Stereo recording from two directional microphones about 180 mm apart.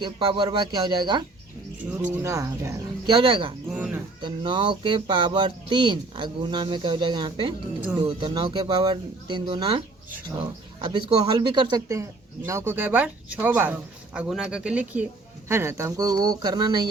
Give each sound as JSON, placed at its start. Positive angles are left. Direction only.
{"t": 0.0, "sound": "speech", "side_deg": -25}
{"t": 1.9, "sound": "speech", "side_deg": -10}
{"t": 3.7, "sound": "speech", "side_deg": -5}
{"t": 4.2, "sound": "speech", "side_deg": -25}